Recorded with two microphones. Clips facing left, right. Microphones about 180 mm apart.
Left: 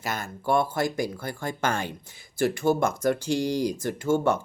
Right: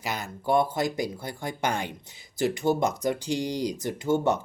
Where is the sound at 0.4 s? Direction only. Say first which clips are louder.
Even; 20° right (ahead or behind).